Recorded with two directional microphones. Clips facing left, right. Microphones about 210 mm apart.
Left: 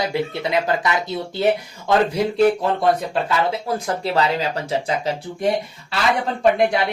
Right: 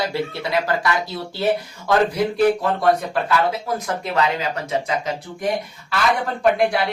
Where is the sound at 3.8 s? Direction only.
30° left (ahead or behind).